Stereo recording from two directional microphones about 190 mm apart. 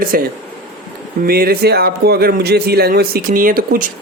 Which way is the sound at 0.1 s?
50° right (ahead or behind).